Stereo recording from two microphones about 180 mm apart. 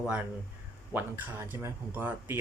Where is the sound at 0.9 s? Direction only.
10° right (ahead or behind).